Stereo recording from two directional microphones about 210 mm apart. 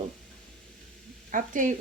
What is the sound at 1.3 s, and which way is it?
Speech, 35° right (ahead or behind).